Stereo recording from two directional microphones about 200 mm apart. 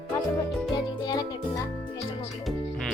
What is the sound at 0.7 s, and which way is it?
Music, 20° left (ahead or behind).